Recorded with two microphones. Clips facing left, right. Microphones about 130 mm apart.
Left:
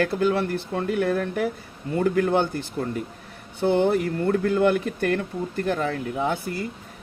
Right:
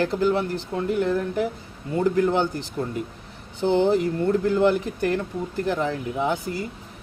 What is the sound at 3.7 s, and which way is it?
Speech, 60° left (ahead or behind).